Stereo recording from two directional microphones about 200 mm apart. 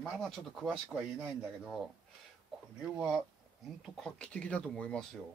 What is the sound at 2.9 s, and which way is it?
A man's voice, 5° right (ahead or behind).